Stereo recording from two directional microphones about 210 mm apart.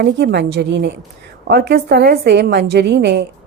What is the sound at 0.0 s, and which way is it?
Speech, 50° right (ahead or behind).